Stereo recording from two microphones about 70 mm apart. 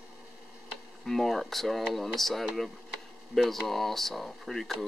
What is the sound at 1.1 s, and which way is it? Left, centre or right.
Speech, centre.